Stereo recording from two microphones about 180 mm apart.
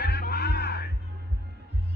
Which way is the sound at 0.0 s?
65° left (ahead or behind).